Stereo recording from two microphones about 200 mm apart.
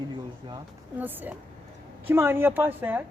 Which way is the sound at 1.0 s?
10° right (ahead or behind).